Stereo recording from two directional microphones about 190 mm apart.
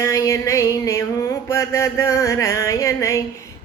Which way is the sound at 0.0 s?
15° left (ahead or behind).